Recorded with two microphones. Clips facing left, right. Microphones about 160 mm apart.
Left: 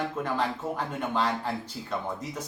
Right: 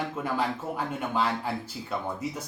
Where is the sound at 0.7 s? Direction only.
10° right (ahead or behind).